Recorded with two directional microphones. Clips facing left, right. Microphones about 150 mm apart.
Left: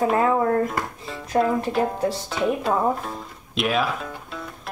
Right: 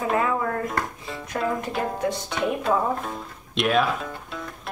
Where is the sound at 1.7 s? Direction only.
Centre (ahead or behind).